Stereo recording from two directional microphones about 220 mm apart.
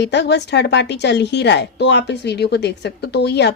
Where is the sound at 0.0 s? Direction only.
50° left (ahead or behind).